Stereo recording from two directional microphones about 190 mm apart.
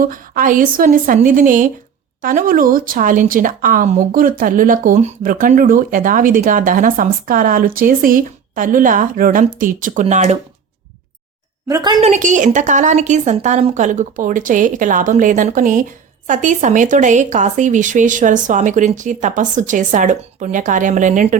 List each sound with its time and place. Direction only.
0.0 s speech: 45° right (ahead or behind)
11.7 s a woman's voice: 20° right (ahead or behind)
11.9 s a woman's voice: 40° right (ahead or behind)